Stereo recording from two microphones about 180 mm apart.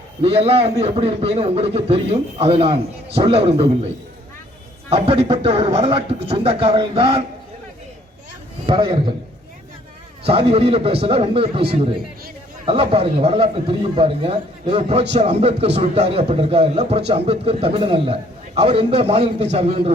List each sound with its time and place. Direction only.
0.2 s a man's voice: 35° right (ahead or behind)
4.9 s a man's voice: 35° right (ahead or behind)
8.6 s a man's voice: 25° right (ahead or behind)
10.2 s a man's voice: 30° right (ahead or behind)